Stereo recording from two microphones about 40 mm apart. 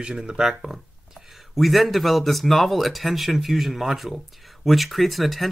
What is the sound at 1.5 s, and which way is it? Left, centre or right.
Speech, centre.